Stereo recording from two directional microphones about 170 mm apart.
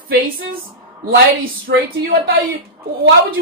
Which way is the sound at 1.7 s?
65° right (ahead or behind).